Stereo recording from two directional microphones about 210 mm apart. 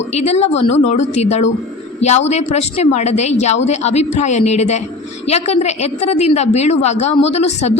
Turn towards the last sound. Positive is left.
turn(degrees=30)  # may be behind; listen again after turning